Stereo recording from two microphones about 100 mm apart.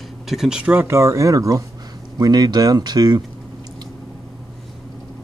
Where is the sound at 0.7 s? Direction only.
25° right (ahead or behind); by 3.2 s 45° right (ahead or behind).